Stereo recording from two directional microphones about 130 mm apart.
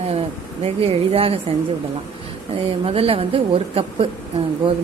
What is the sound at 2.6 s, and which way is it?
A woman's voice, 45° right (ahead or behind).